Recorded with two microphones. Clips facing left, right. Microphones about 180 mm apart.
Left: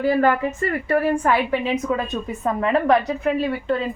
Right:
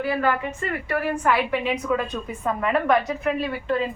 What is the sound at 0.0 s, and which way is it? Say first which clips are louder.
A woman's voice: left 5 dB; 35° left (ahead or behind).